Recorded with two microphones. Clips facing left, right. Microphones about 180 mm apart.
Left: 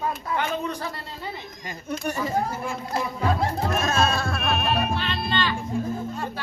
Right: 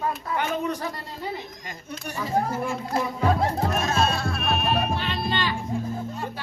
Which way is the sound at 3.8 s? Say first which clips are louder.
Left 1 dB; 50° left (ahead or behind).